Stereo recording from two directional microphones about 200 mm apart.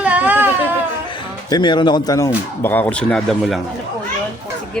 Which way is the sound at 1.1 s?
20° left (ahead or behind).